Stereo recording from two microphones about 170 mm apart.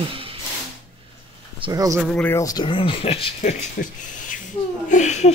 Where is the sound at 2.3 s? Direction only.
20° left (ahead or behind).